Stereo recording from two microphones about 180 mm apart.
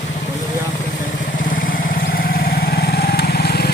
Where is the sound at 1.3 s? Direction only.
50° left (ahead or behind).